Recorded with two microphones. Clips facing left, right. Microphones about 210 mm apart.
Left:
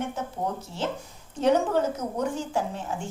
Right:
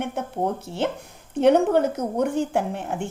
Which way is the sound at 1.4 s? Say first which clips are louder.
Right 5 dB; 60° right (ahead or behind).